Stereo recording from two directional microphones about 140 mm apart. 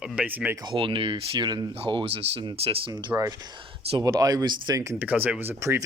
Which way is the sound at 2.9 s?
25° right (ahead or behind).